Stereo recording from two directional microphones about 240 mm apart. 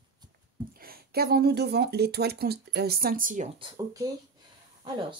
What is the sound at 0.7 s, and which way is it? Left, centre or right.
Speech, right.